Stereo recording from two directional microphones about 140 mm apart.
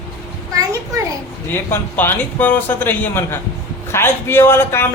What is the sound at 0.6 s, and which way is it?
Speech, 25° right (ahead or behind).